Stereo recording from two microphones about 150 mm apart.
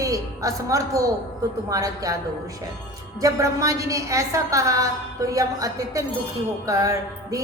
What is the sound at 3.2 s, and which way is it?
A woman's voice, 20° right (ahead or behind).